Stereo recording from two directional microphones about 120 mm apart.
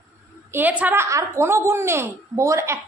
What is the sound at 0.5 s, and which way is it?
A woman's voice, 15° right (ahead or behind).